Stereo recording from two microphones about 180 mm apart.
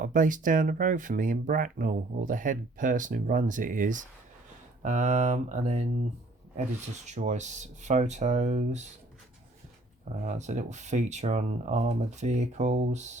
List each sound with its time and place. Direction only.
0.0 s speech: 45° right (ahead or behind)
7.0 s speech: 40° right (ahead or behind)
10.2 s speech: 40° right (ahead or behind)